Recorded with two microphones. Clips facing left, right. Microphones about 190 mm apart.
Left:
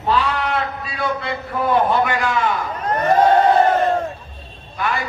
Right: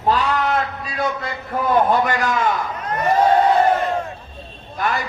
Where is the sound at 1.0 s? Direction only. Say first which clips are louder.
Even; 45° right (ahead or behind).